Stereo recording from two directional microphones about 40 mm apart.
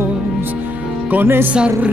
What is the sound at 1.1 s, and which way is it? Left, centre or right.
Speech, right.